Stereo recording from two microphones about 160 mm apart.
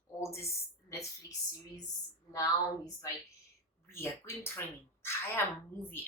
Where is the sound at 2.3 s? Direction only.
20° left (ahead or behind).